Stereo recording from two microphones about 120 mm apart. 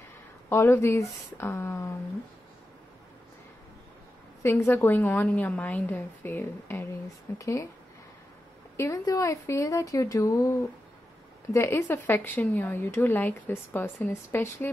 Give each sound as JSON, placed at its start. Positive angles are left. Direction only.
{"t": 0.5, "sound": "speech", "side_deg": 20}
{"t": 4.4, "sound": "a woman's voice", "side_deg": 20}
{"t": 8.7, "sound": "speech", "side_deg": 25}
{"t": 11.5, "sound": "speech", "side_deg": 20}